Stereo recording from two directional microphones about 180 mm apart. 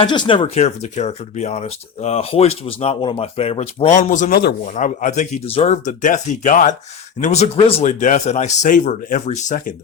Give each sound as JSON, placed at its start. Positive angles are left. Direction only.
{"t": 0.0, "sound": "speech", "side_deg": 25}